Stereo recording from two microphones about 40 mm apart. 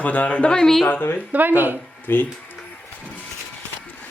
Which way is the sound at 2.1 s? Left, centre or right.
Left.